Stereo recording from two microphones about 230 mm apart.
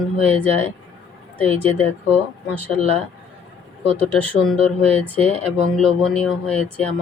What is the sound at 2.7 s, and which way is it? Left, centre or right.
Speech, right.